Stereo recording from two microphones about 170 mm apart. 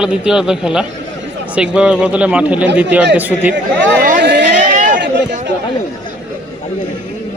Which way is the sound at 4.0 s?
75° right (ahead or behind).